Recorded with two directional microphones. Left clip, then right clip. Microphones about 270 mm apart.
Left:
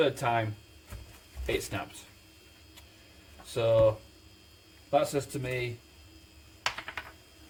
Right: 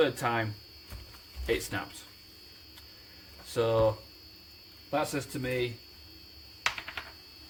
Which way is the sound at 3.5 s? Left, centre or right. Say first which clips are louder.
Left 2 dB; centre.